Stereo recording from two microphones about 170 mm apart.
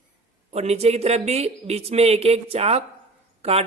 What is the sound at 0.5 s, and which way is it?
A man's voice, 40° right (ahead or behind).